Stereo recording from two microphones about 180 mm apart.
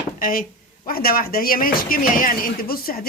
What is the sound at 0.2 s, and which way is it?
A woman's voice, 50° left (ahead or behind).